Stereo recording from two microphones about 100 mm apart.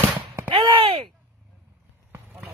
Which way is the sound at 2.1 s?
20° right (ahead or behind).